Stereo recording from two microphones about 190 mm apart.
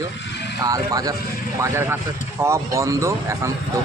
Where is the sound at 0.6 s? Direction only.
20° right (ahead or behind).